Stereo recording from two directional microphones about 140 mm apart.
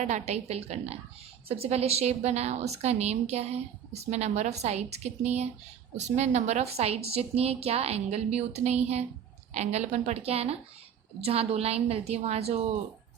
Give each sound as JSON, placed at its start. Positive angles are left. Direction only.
{"t": 0.0, "sound": "a woman's voice", "side_deg": -55}